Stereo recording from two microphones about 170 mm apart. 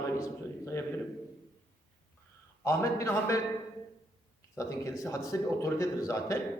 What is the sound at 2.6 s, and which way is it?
Speech, 15° left (ahead or behind).